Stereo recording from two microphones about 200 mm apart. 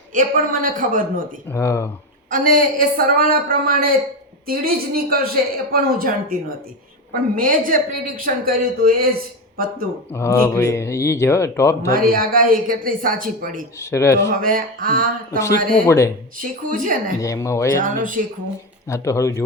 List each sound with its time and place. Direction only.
0.1 s a woman's voice: 45° right (ahead or behind)
1.5 s speech: 15° left (ahead or behind)
2.3 s a woman's voice: 40° right (ahead or behind)
10.1 s speech: 15° left (ahead or behind)
11.9 s a woman's voice: 45° right (ahead or behind)
13.7 s speech: 15° left (ahead or behind)
14.3 s a woman's voice: 45° right (ahead or behind)
15.7 s speech: 15° left (ahead or behind)
16.4 s speech: 40° right (ahead or behind)
17.2 s speech: 15° left (ahead or behind)
17.8 s a woman's voice: 40° right (ahead or behind)
18.9 s speech: 15° left (ahead or behind)